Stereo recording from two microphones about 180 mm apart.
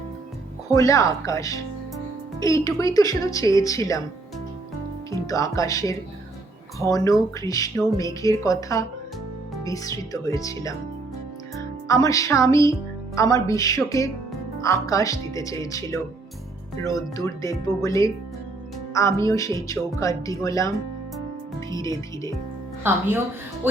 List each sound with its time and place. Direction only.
0.7 s speech: 20° left (ahead or behind)
5.1 s speech: 20° left (ahead or behind)
11.9 s speech: 20° left (ahead or behind)
22.8 s speech: 10° right (ahead or behind)